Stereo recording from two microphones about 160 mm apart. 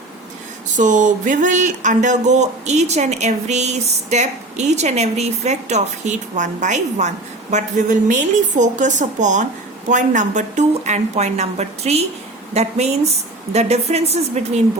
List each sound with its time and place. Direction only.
0.8 s speech: 50° right (ahead or behind)